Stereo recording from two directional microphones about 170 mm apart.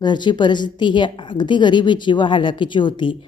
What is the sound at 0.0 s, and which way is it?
A woman's voice, 25° left (ahead or behind).